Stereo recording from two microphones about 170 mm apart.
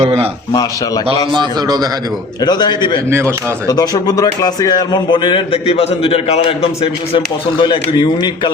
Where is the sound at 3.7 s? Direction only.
20° left (ahead or behind).